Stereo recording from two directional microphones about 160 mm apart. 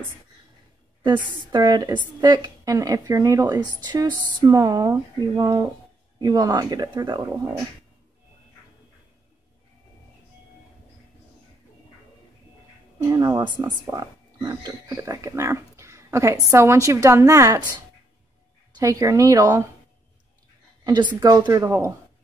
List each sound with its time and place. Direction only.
1.5 s speech: 25° right (ahead or behind)
13.0 s speech: 20° right (ahead or behind)
20.8 s a woman's voice: 30° right (ahead or behind)